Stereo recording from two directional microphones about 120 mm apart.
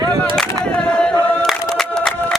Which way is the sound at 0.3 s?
10° left (ahead or behind).